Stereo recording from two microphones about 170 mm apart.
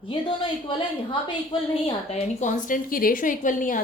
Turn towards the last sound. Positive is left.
turn(degrees=50)  # may be behind; listen again after turning